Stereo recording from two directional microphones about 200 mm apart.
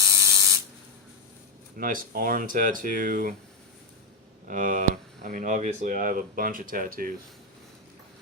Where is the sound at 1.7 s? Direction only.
45° right (ahead or behind).